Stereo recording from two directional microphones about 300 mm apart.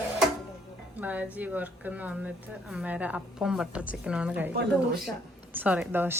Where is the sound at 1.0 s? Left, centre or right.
Centre.